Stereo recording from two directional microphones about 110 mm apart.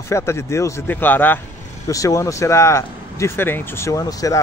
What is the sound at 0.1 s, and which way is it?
Speech, 25° left (ahead or behind).